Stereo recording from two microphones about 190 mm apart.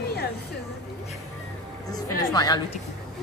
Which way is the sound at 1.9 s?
20° left (ahead or behind).